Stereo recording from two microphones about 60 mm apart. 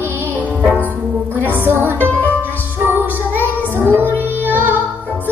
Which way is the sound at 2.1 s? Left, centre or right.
Left.